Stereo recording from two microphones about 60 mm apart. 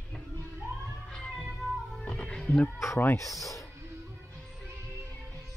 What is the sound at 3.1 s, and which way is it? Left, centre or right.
Speech, left.